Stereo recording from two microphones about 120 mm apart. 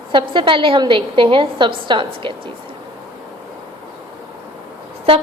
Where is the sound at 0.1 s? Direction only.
45° right (ahead or behind).